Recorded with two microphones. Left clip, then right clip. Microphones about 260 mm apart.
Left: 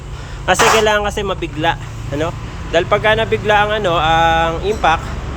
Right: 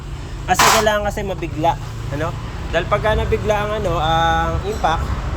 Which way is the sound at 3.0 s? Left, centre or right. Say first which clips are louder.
Left 4 dB; centre.